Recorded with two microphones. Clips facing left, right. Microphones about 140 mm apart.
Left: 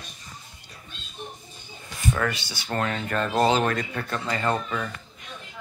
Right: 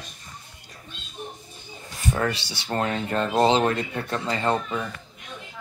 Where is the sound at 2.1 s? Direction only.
30° right (ahead or behind).